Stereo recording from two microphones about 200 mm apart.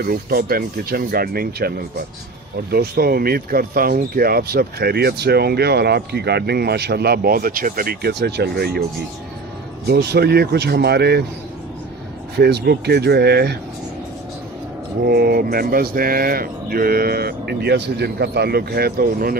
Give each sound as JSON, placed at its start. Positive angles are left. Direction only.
{"t": 0.0, "sound": "speech", "side_deg": -50}
{"t": 9.8, "sound": "speech", "side_deg": -55}
{"t": 12.4, "sound": "speech", "side_deg": -55}
{"t": 15.0, "sound": "speech", "side_deg": -50}